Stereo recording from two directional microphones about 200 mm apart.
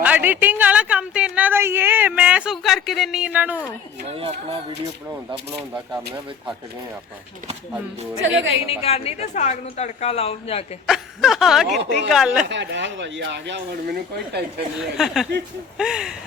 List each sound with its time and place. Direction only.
0.0 s a woman's voice: 10° right (ahead or behind)
8.2 s speech: 70° right (ahead or behind)
8.6 s a woman's voice: 30° left (ahead or behind)
10.8 s a sound: centre (ahead or behind)
12.5 s speech: 60° right (ahead or behind)
14.8 s a sound: centre (ahead or behind)